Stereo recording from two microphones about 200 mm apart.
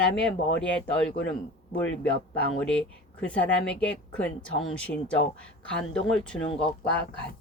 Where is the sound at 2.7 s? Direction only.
5° left (ahead or behind).